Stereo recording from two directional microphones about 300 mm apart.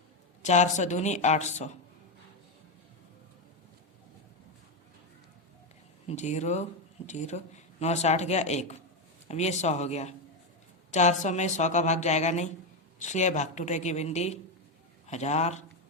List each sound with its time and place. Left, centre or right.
0.4 s speech: left
6.1 s speech: left